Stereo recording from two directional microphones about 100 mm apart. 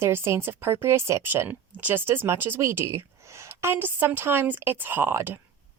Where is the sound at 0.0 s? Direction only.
25° right (ahead or behind).